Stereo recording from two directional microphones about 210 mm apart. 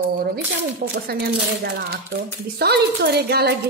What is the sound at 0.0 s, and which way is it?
A woman's voice, 45° right (ahead or behind).